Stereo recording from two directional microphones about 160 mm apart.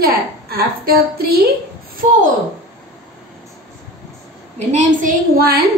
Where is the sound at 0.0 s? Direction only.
70° right (ahead or behind).